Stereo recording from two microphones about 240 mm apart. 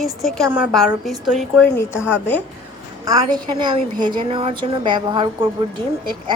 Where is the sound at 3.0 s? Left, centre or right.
Centre.